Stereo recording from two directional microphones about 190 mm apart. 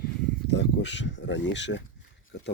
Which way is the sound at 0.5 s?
70° left (ahead or behind).